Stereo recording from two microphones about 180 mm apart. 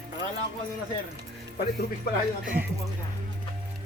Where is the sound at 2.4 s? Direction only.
10° right (ahead or behind).